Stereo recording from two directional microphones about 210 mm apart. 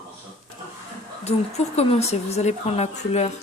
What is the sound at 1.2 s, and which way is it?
Speech, 30° left (ahead or behind).